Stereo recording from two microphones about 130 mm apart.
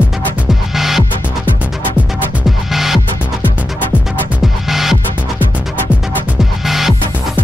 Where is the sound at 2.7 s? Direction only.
Centre (ahead or behind).